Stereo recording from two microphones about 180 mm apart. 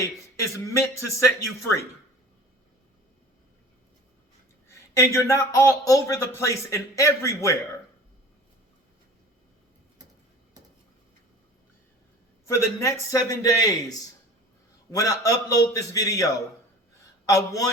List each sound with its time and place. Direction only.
0.0 s a man's voice: 15° left (ahead or behind)
4.7 s a man's voice: 15° left (ahead or behind)
12.5 s a man's voice: 15° left (ahead or behind)
14.9 s a man's voice: 20° left (ahead or behind)